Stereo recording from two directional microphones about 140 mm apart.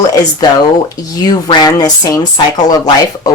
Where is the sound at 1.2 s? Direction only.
30° left (ahead or behind).